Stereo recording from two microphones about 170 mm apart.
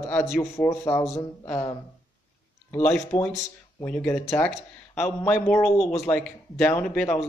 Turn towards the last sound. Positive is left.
turn(degrees=15)  # may be behind; listen again after turning